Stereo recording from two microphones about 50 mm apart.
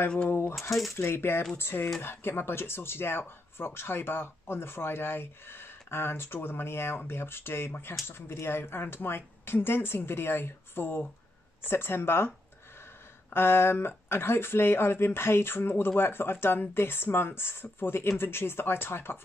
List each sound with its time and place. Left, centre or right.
0.3 s speech: left
0.6 s speech: centre
1.0 s speech: left
13.3 s speech: left